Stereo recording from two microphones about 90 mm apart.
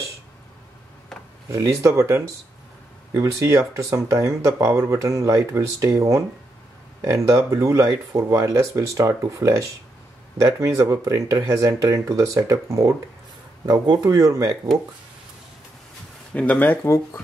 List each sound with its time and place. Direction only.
1.5 s speech: 35° right (ahead or behind)
14.0 s speech: 40° right (ahead or behind)
16.3 s speech: 15° left (ahead or behind)
16.8 s speech: 30° left (ahead or behind)